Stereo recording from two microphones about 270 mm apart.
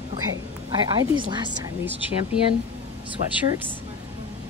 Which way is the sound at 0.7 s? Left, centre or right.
Centre.